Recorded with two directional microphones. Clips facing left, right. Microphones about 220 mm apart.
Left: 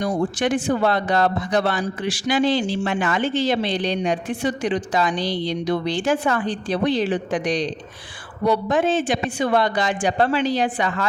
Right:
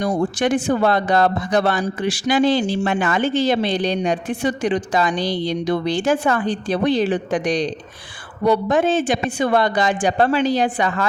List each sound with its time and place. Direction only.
0.0 s speech: 45° right (ahead or behind)